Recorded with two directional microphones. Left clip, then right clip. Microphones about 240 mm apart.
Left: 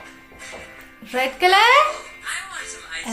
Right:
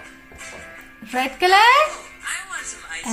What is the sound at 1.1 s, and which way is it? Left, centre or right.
Speech, centre.